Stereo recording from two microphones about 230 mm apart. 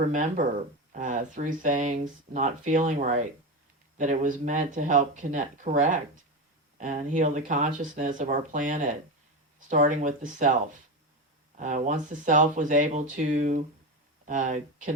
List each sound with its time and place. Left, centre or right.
0.0 s speech: right
11.5 s speech: right